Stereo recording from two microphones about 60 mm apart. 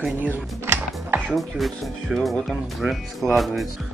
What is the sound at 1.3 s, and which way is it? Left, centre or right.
Speech, centre.